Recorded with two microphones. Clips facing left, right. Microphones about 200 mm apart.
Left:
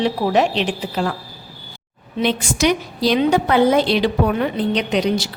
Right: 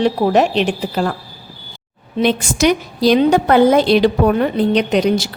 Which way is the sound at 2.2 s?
45° right (ahead or behind).